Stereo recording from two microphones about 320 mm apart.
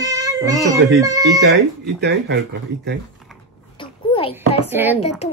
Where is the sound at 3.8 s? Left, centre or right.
Centre.